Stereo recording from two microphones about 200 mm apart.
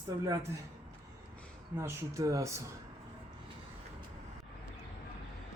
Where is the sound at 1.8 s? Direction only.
15° right (ahead or behind).